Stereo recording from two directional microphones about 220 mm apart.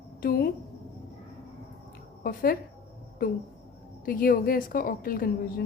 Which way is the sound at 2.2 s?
40° left (ahead or behind).